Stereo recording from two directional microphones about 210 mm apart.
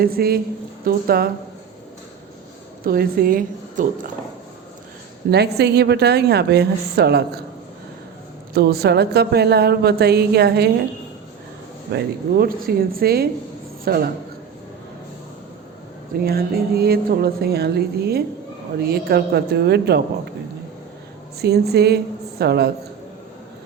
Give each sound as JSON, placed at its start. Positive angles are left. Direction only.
{"t": 0.0, "sound": "a woman's voice", "side_deg": -45}
{"t": 2.8, "sound": "a woman's voice", "side_deg": -45}
{"t": 5.3, "sound": "a woman's voice", "side_deg": -50}
{"t": 8.5, "sound": "a woman's voice", "side_deg": -50}
{"t": 11.9, "sound": "a woman's voice", "side_deg": -50}
{"t": 16.1, "sound": "a woman's voice", "side_deg": -45}
{"t": 21.3, "sound": "a woman's voice", "side_deg": -50}